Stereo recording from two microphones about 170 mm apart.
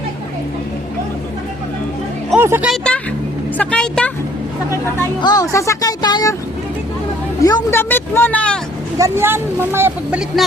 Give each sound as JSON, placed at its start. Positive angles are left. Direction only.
{"t": 2.4, "sound": "speech", "side_deg": -15}
{"t": 2.6, "sound": "a sound", "side_deg": 5}
{"t": 3.6, "sound": "speech", "side_deg": 5}
{"t": 5.2, "sound": "speech", "side_deg": 20}
{"t": 7.4, "sound": "speech", "side_deg": 20}
{"t": 9.0, "sound": "speech", "side_deg": -15}